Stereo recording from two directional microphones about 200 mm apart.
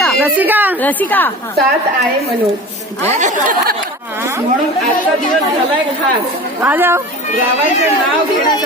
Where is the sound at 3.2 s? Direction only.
40° right (ahead or behind).